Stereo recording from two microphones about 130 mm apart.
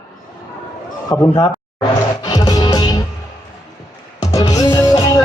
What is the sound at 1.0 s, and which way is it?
Speech, 25° left (ahead or behind).